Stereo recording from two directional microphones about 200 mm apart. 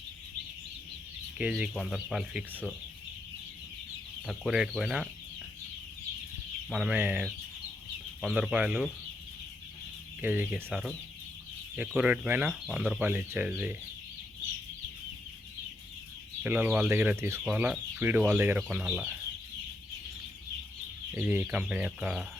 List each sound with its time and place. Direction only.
1.4 s speech: 5° right (ahead or behind)
4.3 s speech: 5° right (ahead or behind)
6.7 s speech: 5° right (ahead or behind)
10.2 s speech: 10° right (ahead or behind)
11.9 s speech: 5° right (ahead or behind)
16.4 s speech: 10° right (ahead or behind)
21.2 s speech: 10° right (ahead or behind)